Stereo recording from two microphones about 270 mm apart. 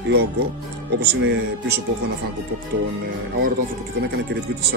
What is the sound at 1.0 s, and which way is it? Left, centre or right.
Speech, right.